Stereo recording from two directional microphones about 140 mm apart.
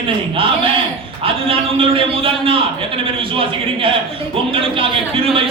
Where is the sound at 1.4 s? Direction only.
40° right (ahead or behind).